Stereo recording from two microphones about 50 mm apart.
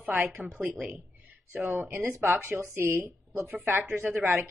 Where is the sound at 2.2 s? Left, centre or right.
Right.